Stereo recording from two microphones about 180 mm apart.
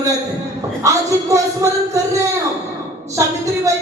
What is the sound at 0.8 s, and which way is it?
A woman's voice, 15° right (ahead or behind).